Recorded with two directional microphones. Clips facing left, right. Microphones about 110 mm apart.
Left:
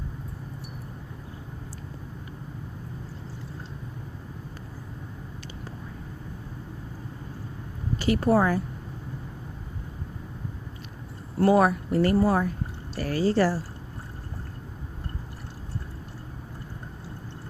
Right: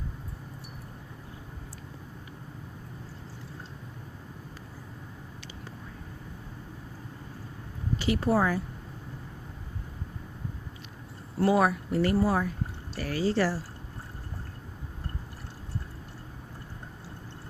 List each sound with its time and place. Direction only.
7.9 s speech: 50° left (ahead or behind)
11.3 s speech: 50° left (ahead or behind)